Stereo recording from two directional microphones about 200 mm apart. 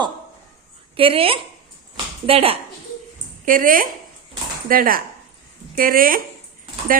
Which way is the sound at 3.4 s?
45° right (ahead or behind).